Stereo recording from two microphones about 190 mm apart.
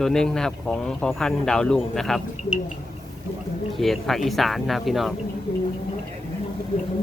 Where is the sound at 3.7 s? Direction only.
Centre (ahead or behind).